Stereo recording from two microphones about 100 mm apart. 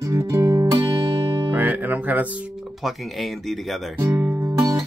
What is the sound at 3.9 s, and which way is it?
Music, 20° right (ahead or behind).